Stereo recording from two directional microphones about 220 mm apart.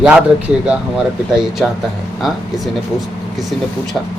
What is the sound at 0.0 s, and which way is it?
Speech, 5° right (ahead or behind).